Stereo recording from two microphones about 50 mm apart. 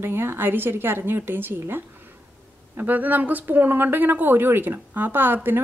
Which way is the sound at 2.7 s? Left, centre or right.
Right.